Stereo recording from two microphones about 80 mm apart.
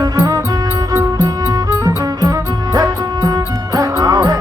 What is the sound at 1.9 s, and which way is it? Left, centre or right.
Music, right.